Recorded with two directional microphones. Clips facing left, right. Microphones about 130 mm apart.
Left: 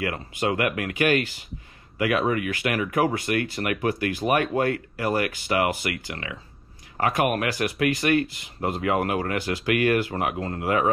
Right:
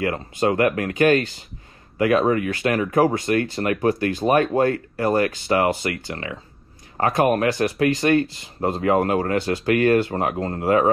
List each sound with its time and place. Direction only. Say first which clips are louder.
0.0 s speech: right 5 dB; 35° right (ahead or behind)